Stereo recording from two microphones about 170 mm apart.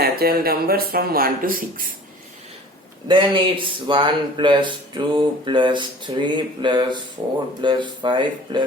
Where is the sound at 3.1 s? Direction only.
30° right (ahead or behind).